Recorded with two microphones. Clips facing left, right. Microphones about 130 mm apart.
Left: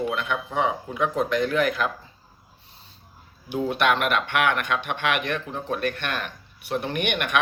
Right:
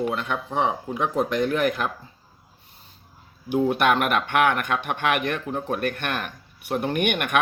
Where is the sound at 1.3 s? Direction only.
45° right (ahead or behind).